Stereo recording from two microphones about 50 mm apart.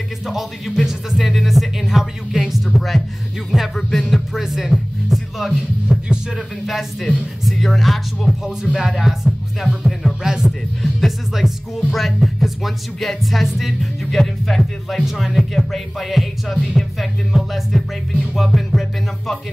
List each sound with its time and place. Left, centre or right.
0.7 s speech: centre
8.7 s music: centre
10.2 s speech: centre
10.8 s speech: centre